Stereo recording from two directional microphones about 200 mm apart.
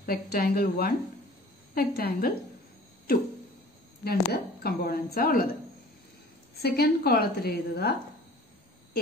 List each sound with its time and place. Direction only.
0.0 s a woman's voice: 50° left (ahead or behind)
4.0 s a woman's voice: 50° left (ahead or behind)
6.6 s a woman's voice: 50° left (ahead or behind)